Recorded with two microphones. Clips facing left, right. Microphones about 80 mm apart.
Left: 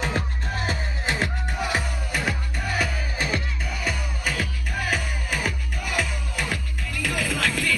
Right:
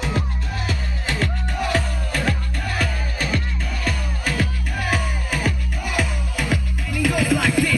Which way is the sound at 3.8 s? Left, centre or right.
Centre.